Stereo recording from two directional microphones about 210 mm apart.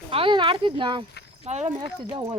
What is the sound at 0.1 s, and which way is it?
Speech, 25° right (ahead or behind).